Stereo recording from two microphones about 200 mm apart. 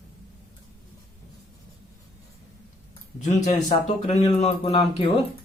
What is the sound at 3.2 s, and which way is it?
Speech, 40° left (ahead or behind).